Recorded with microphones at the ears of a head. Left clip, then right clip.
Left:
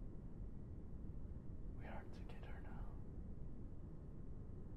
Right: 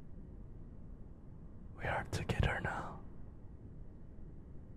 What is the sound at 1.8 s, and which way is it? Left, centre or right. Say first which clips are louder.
Whispering: right 19 dB; right.